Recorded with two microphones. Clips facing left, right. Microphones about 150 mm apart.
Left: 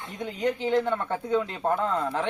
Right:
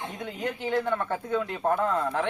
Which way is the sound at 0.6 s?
20° left (ahead or behind).